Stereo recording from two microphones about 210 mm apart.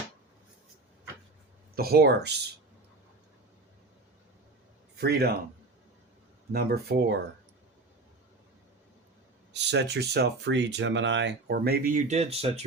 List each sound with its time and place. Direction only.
1.7 s speech: 45° right (ahead or behind)
4.9 s a man's voice: 50° right (ahead or behind)
6.5 s speech: 45° right (ahead or behind)
9.5 s speech: 55° right (ahead or behind); by 12.6 s 30° right (ahead or behind)